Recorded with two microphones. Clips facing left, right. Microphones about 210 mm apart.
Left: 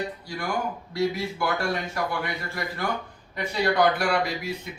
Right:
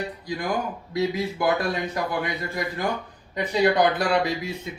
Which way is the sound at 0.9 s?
20° right (ahead or behind).